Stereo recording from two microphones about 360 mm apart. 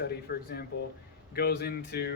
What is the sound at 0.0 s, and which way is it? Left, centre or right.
Speech, left.